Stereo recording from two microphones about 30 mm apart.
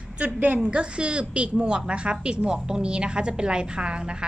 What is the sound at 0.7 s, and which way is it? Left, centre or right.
A woman's voice, right.